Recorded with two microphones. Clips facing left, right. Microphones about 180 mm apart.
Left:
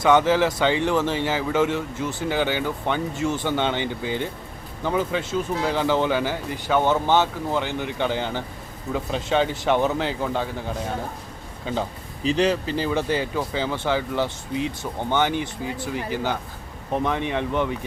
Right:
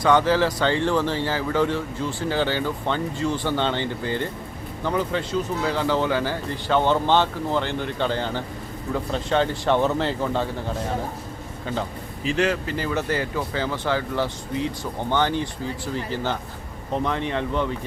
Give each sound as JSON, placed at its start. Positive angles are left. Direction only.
{"t": 0.0, "sound": "speech", "side_deg": 20}
{"t": 12.2, "sound": "speech", "side_deg": 20}